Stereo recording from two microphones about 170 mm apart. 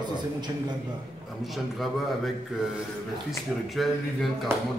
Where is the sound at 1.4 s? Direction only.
Centre (ahead or behind).